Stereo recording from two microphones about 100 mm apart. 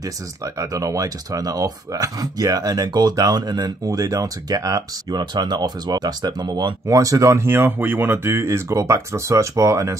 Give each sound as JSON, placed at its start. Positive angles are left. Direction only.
{"t": 0.6, "sound": "speech", "side_deg": -35}